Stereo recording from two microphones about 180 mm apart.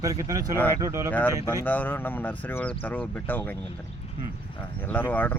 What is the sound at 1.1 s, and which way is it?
Speech, 10° left (ahead or behind).